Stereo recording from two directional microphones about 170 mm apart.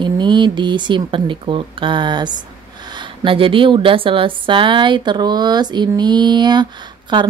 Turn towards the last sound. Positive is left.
turn(degrees=-25)  # may be behind; listen again after turning